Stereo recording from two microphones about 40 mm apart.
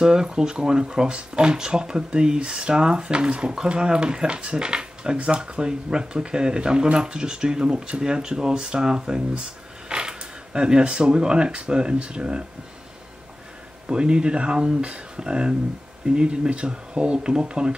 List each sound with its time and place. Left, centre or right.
0.0 s speech: centre
13.8 s speech: right